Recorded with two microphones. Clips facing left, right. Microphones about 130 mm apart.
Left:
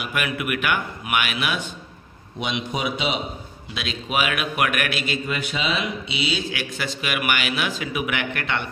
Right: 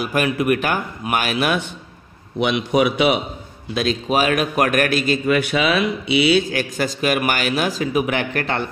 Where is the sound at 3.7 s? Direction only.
40° right (ahead or behind).